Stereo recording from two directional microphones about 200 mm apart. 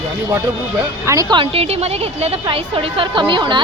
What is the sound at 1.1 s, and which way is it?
A woman's voice, 20° right (ahead or behind).